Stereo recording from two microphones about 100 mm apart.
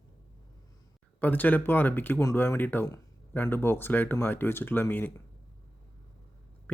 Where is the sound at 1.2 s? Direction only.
15° left (ahead or behind).